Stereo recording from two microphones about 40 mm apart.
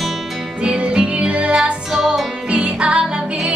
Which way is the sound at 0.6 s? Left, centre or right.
Right.